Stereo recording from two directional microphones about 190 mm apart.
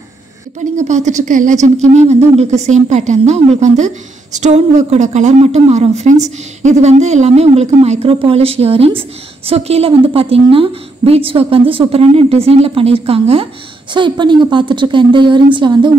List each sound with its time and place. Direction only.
0.7 s a woman's voice: 40° right (ahead or behind); by 15.9 s 25° right (ahead or behind)